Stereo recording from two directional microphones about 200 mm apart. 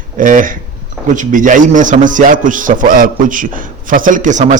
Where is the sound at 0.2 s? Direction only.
45° right (ahead or behind).